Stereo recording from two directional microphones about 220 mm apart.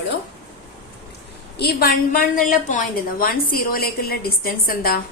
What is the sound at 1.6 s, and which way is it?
A woman's voice, 45° left (ahead or behind).